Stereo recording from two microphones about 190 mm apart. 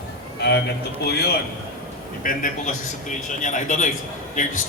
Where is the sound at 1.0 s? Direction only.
60° left (ahead or behind).